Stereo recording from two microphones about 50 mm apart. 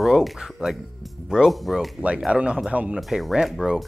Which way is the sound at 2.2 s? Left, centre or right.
Centre.